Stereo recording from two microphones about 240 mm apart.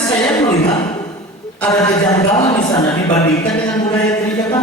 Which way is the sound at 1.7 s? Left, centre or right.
Centre.